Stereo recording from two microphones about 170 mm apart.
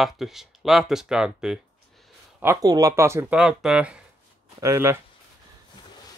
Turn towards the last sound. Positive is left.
turn(degrees=-15)  # may be behind; listen again after turning